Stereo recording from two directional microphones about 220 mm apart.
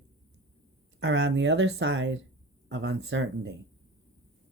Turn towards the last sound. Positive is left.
turn(degrees=-55)  # may be behind; listen again after turning